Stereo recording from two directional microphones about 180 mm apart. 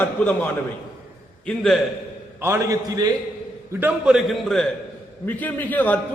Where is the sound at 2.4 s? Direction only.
15° right (ahead or behind).